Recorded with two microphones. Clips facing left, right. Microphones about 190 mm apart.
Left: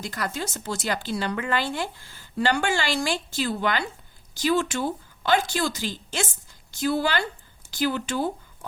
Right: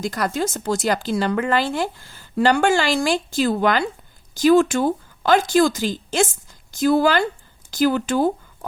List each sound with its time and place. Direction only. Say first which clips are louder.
0.0 s speech: right 8 dB; 40° right (ahead or behind)